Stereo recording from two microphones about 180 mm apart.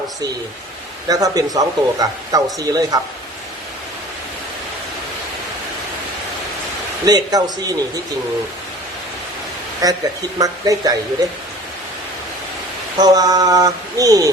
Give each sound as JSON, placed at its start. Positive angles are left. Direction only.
{"t": 1.0, "sound": "speech", "side_deg": -20}
{"t": 7.0, "sound": "speech", "side_deg": -20}
{"t": 9.8, "sound": "speech", "side_deg": -20}
{"t": 13.0, "sound": "speech", "side_deg": -20}